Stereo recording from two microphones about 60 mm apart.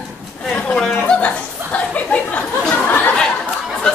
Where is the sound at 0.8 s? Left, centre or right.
Centre.